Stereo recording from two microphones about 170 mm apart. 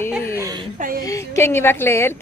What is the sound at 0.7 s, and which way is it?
Speech, 55° right (ahead or behind).